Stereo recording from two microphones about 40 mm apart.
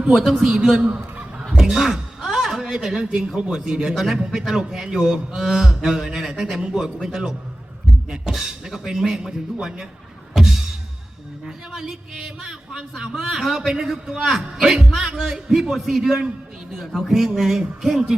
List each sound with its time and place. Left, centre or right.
0.1 s a man's voice: centre
1.5 s a sound: centre
3.0 s a man's voice: right
10.3 s music: centre
11.4 s a man's voice: centre